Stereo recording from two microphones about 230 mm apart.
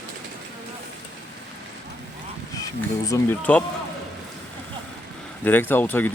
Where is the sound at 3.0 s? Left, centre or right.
Centre.